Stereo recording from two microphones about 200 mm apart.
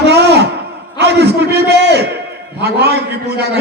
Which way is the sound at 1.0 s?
55° right (ahead or behind).